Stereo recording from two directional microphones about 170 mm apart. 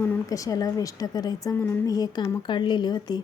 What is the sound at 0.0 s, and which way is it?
Speech, 15° left (ahead or behind).